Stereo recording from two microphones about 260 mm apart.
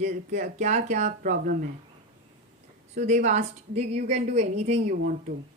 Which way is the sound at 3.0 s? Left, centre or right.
Right.